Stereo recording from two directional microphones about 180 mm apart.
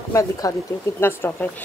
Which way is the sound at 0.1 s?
15° left (ahead or behind).